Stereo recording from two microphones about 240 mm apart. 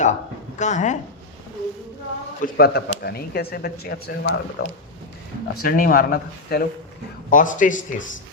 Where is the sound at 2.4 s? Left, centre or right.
Left.